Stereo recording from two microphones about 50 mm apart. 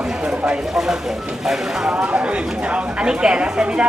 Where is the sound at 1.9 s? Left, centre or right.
Right.